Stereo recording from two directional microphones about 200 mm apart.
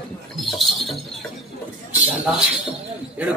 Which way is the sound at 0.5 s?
Centre (ahead or behind).